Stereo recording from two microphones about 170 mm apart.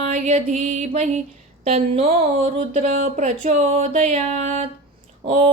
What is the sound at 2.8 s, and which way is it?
Speech, 50° right (ahead or behind).